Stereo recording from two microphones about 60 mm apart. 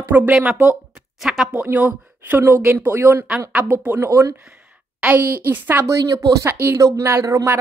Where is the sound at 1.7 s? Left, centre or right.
Right.